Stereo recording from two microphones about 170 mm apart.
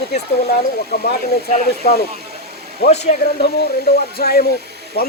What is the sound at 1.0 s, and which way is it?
Speech, 70° left (ahead or behind).